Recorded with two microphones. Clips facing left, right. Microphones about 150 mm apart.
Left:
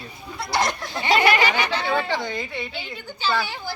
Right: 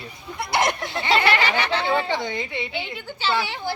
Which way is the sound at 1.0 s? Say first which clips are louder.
Left 2 dB; 20° left (ahead or behind).